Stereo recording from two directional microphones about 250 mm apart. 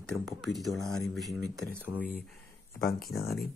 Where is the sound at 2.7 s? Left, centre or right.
Left.